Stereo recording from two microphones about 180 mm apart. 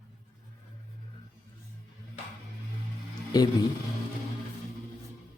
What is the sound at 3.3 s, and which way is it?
Mantra, 20° left (ahead or behind).